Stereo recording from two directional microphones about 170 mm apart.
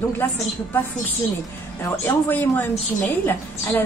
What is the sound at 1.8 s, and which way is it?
Speech, 15° left (ahead or behind).